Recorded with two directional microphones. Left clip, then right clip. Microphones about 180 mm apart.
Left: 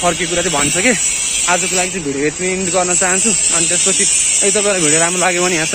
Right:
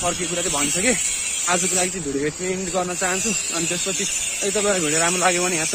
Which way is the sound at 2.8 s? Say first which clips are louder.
Left 8 dB; 5° right (ahead or behind).